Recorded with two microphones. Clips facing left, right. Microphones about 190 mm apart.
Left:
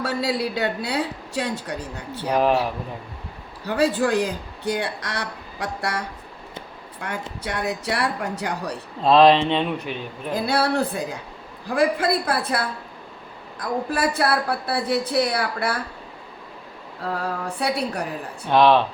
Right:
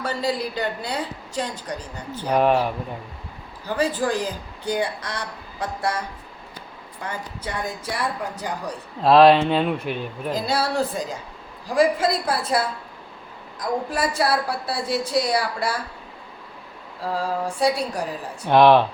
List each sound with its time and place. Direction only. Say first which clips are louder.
0.0 s a woman's voice: left 1 dB; 70° left (ahead or behind)
2.3 s speech: right 1 dB; centre (ahead or behind)
3.7 s speech: left 2 dB; 70° left (ahead or behind)
7.4 s speech: left 3 dB; 70° left (ahead or behind)
9.0 s speech: right 1 dB; 5° right (ahead or behind)
10.3 s a woman's voice: left 2 dB; 60° left (ahead or behind)
17.2 s a woman's voice: right 5 dB; 60° left (ahead or behind)
18.4 s speech: right 2 dB; 15° right (ahead or behind)